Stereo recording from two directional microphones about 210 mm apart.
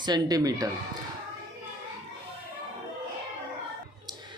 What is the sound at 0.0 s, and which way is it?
Speech, 20° right (ahead or behind).